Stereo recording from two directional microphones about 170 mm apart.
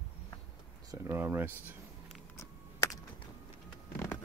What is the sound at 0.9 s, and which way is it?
Speech, 15° right (ahead or behind).